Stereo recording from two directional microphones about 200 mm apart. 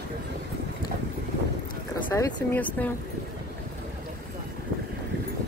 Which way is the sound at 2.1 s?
15° left (ahead or behind).